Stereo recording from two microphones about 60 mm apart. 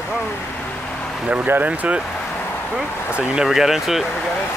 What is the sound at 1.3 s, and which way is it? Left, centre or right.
Speech, right.